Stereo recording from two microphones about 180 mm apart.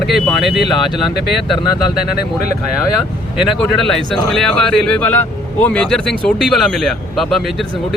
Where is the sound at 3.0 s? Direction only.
Centre (ahead or behind).